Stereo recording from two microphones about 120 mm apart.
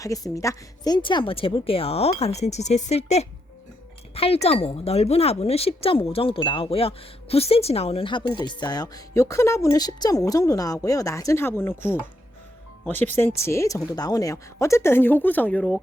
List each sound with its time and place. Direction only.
0.0 s speech: 30° left (ahead or behind)
0.9 s speech: 40° left (ahead or behind); by 11.7 s 20° left (ahead or behind)
12.9 s speech: 15° left (ahead or behind)